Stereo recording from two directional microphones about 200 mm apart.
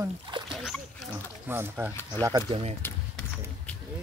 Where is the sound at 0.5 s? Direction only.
Centre (ahead or behind).